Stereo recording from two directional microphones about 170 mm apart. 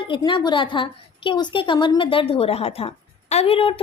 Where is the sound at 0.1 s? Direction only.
30° left (ahead or behind).